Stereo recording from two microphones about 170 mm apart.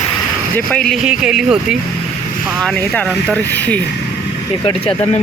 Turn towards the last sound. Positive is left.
turn(degrees=30)  # may be behind; listen again after turning